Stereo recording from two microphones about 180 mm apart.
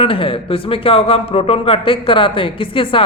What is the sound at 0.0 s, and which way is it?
A man's voice, 30° left (ahead or behind).